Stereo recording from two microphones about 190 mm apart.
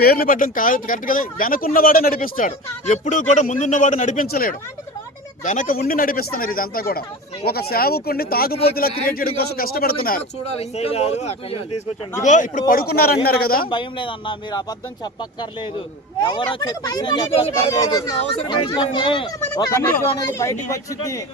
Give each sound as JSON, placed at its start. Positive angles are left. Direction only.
{"t": 0.0, "sound": "speech", "side_deg": 55}
{"t": 10.6, "sound": "a man's voice", "side_deg": 30}
{"t": 13.7, "sound": "speech", "side_deg": 25}